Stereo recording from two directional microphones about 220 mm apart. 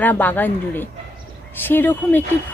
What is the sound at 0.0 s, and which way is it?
Speech, 10° left (ahead or behind).